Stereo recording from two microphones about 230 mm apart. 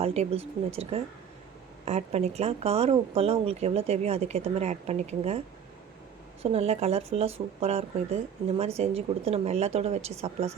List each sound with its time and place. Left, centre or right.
0.0 s speech: right
6.4 s speech: right